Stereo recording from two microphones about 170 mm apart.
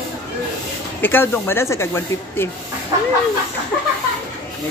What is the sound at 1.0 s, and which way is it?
Speech, 10° left (ahead or behind).